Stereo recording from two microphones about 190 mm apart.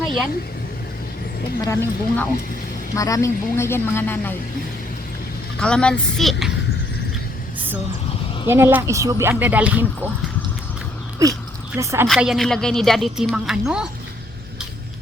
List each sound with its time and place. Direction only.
0.0 s vehicle: centre (ahead or behind)
1.6 s a woman's voice: 15° left (ahead or behind)
5.5 s a woman's voice: 5° left (ahead or behind)
8.4 s speech: 10° right (ahead or behind)
11.2 s speech: 15° right (ahead or behind)
12.0 s a woman's voice: centre (ahead or behind)